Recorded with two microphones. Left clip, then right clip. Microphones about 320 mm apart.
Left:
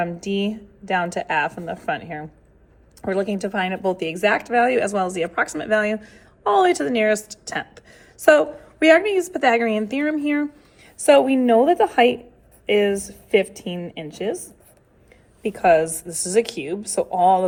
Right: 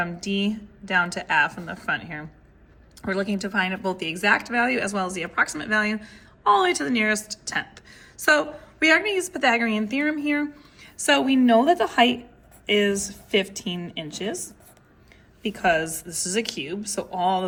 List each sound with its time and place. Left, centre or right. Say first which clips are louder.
0.0 s a woman's voice: left 3 dB; centre
15.4 s speech: left 6 dB; centre